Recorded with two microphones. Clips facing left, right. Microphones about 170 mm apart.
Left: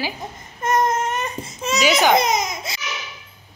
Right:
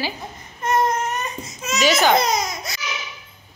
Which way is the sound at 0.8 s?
25° left (ahead or behind).